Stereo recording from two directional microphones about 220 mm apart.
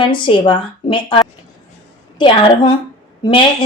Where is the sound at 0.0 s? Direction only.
20° left (ahead or behind).